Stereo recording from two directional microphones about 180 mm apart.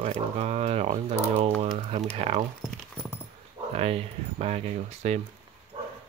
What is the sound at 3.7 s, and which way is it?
Speech, 35° right (ahead or behind).